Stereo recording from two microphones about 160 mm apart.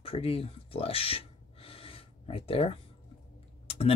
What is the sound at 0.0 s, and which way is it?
Speech, 35° left (ahead or behind).